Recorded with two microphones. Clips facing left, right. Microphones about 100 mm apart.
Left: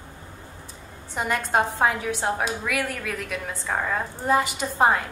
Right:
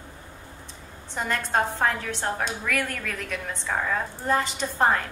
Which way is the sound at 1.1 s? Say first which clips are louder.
Left 2 dB; 10° left (ahead or behind).